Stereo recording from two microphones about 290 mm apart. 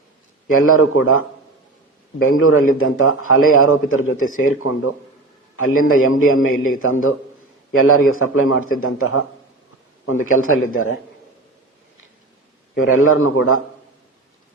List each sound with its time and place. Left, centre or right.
0.4 s a man's voice: left
2.2 s a man's voice: left
10.3 s a man's voice: left
12.8 s a man's voice: left